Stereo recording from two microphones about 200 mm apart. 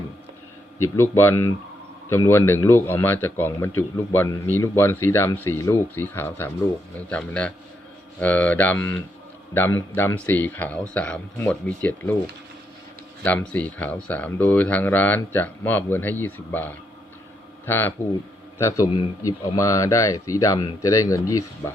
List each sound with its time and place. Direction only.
0.8 s a man's voice: 10° left (ahead or behind)
13.2 s speech: 5° left (ahead or behind)